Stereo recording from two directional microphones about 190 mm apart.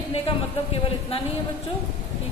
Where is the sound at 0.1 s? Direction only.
30° left (ahead or behind).